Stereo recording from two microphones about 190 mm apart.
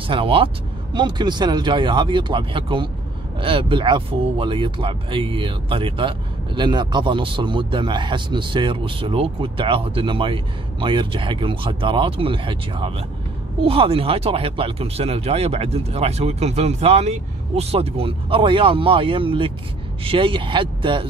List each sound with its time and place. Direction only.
0.0 s speech: 25° right (ahead or behind)